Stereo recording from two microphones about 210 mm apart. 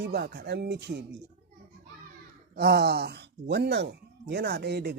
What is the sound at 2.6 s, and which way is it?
Speech, 50° right (ahead or behind).